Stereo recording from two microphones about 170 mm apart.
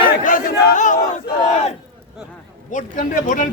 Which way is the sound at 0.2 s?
50° left (ahead or behind).